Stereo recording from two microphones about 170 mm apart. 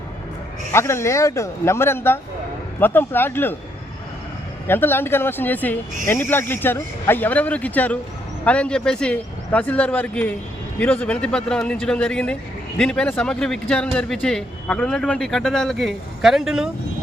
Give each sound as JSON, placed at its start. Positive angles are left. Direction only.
{"t": 0.7, "sound": "speech", "side_deg": 15}
{"t": 4.6, "sound": "speech", "side_deg": 15}